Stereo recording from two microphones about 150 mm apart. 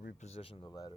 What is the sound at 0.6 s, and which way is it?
Speech, 25° left (ahead or behind).